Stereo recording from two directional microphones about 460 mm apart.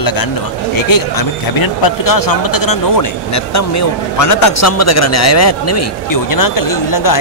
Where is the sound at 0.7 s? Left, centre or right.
Left.